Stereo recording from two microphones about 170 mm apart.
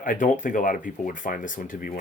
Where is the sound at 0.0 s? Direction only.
50° left (ahead or behind).